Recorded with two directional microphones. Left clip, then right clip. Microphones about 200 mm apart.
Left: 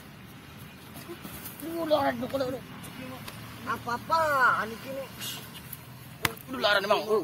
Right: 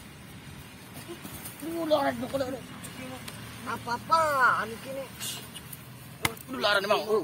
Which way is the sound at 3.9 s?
10° right (ahead or behind).